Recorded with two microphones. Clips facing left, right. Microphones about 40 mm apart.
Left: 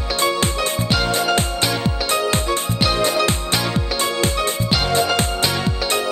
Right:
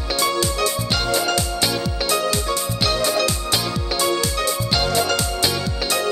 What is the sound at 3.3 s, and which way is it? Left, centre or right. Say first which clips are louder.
Music: left 2 dB; left.